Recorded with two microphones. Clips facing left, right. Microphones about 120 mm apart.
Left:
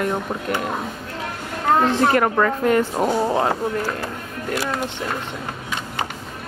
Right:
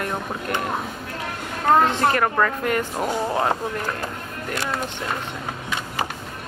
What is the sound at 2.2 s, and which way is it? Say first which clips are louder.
Speech: left 3 dB; 30° left (ahead or behind).